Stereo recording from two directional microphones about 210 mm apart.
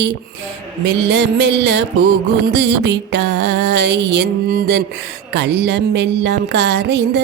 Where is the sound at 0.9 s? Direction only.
55° right (ahead or behind).